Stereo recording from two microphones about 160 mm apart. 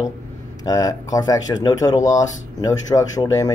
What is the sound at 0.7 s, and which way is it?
Speech, 20° left (ahead or behind).